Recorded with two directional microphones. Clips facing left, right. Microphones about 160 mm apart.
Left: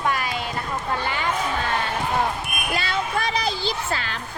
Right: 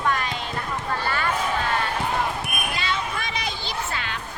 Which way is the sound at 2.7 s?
40° left (ahead or behind).